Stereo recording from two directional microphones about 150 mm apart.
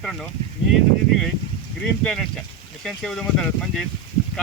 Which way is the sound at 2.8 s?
5° left (ahead or behind).